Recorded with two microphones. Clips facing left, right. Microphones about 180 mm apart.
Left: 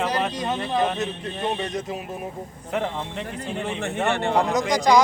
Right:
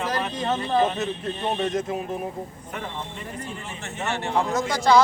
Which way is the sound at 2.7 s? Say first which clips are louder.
Left 7 dB; 75° left (ahead or behind).